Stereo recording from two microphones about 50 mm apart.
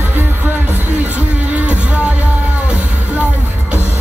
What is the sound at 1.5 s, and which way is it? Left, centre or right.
Music, right.